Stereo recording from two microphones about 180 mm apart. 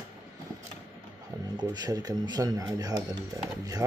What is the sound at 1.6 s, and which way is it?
Speech, 25° right (ahead or behind).